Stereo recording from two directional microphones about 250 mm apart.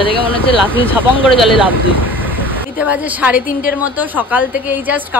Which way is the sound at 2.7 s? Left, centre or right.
Centre.